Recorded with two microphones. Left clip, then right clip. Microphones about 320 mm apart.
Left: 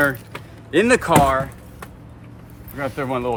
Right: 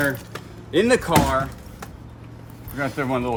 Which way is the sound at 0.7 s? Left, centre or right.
Left.